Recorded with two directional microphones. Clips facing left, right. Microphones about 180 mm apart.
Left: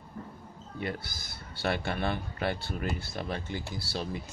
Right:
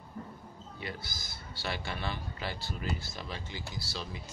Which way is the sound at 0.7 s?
55° left (ahead or behind).